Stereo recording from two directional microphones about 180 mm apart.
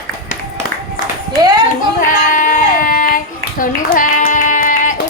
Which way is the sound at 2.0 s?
50° left (ahead or behind).